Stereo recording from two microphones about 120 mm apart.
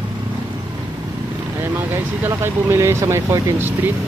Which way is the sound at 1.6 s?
20° right (ahead or behind).